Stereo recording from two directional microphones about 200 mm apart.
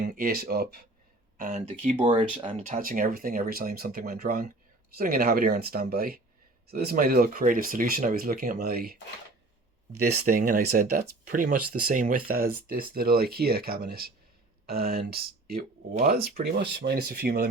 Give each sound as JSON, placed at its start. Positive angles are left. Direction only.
{"t": 0.0, "sound": "speech", "side_deg": -45}
{"t": 2.0, "sound": "speech", "side_deg": -25}
{"t": 2.5, "sound": "speech", "side_deg": -40}
{"t": 10.0, "sound": "speech", "side_deg": -55}